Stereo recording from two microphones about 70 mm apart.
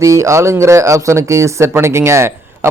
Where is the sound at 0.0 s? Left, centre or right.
Right.